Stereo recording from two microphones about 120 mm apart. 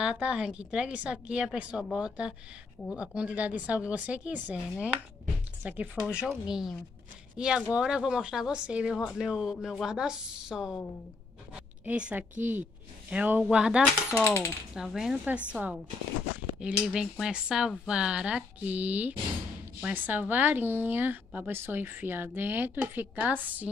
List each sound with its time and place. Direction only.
0.0 s a woman's voice: 10° right (ahead or behind)
14.2 s speech: 15° left (ahead or behind)
14.7 s a woman's voice: 5° right (ahead or behind)